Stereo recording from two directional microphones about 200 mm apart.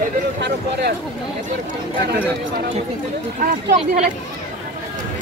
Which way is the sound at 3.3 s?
40° right (ahead or behind).